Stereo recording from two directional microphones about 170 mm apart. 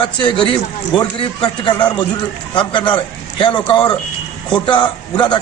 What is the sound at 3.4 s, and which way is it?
A man's voice, 30° left (ahead or behind).